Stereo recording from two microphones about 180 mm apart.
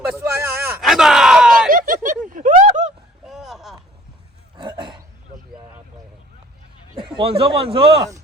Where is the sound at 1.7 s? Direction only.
50° right (ahead or behind).